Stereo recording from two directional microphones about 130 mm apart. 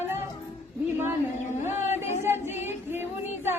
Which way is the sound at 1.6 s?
20° right (ahead or behind).